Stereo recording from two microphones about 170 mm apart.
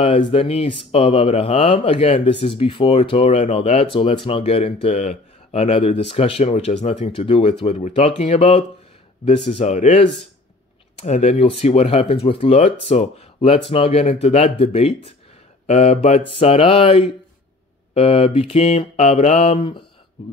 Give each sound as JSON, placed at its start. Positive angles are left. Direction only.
{"t": 0.0, "sound": "speech", "side_deg": 30}